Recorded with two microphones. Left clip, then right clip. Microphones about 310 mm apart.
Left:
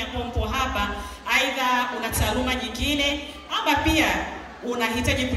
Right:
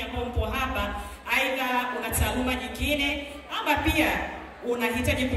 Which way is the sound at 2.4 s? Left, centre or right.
Left.